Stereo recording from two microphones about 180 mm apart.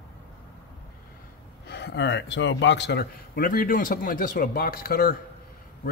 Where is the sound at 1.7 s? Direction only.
70° left (ahead or behind).